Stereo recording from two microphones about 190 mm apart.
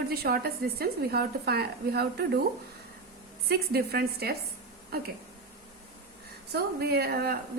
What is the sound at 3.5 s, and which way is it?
Speech, 55° right (ahead or behind).